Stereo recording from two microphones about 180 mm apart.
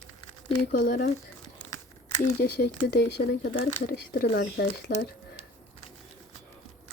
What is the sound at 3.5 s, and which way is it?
A woman's voice, 55° left (ahead or behind).